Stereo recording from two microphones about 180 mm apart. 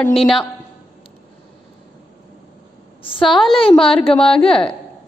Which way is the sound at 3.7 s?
5° left (ahead or behind).